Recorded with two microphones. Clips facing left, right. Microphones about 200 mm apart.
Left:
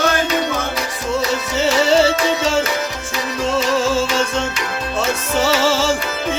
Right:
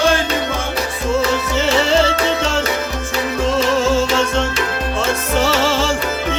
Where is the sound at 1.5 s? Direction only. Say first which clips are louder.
Left 2 dB; centre (ahead or behind).